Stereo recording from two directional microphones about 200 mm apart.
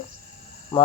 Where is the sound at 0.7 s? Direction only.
25° left (ahead or behind).